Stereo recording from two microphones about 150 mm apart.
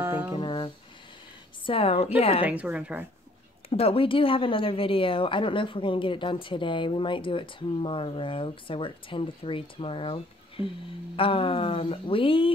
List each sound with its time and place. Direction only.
0.0 s music: 15° right (ahead or behind)
0.4 s a sound: 35° left (ahead or behind)
1.7 s a woman's voice: 40° left (ahead or behind)
2.4 s speech: 10° right (ahead or behind)
3.7 s a woman's voice: 40° left (ahead or behind)